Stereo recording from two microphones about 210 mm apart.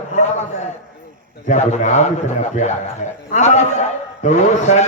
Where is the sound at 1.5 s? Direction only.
35° left (ahead or behind).